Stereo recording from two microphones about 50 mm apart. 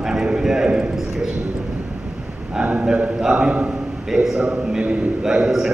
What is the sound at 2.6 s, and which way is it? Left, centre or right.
A man's voice, right.